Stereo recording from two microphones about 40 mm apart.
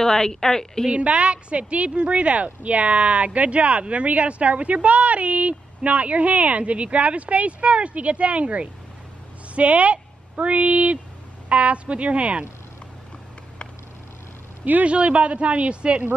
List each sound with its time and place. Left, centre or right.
0.0 s a woman's voice: centre
0.8 s a woman's voice: right
14.6 s a woman's voice: right